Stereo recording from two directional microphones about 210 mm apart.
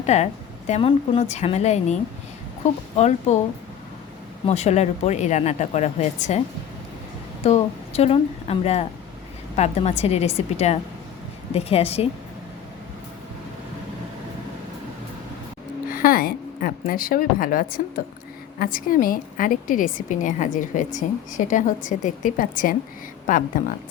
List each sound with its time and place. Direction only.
0.0 s a woman's voice: 30° left (ahead or behind)
4.4 s a woman's voice: 30° left (ahead or behind)
7.4 s a woman's voice: 30° left (ahead or behind)
15.9 s a sound: 40° left (ahead or behind)
18.6 s a woman's voice: 40° left (ahead or behind)